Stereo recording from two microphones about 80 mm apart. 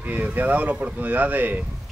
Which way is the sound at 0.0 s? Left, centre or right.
Right.